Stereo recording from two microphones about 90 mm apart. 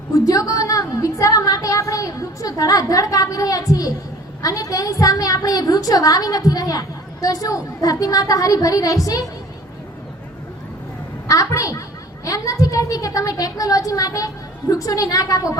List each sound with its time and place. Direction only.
0.3 s a sound: 40° left (ahead or behind)
4.4 s a woman's voice: 40° left (ahead or behind)
11.3 s a woman's voice: 40° left (ahead or behind)